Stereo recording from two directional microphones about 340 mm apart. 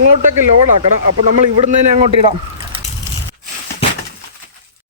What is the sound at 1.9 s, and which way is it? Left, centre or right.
Speech, centre.